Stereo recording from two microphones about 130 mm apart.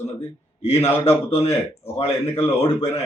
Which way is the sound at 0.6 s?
50° left (ahead or behind).